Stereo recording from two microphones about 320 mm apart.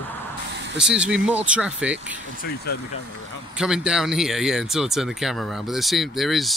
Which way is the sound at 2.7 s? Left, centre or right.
Left.